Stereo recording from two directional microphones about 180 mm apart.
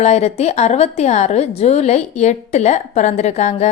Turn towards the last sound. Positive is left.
turn(degrees=40)  # may be behind; listen again after turning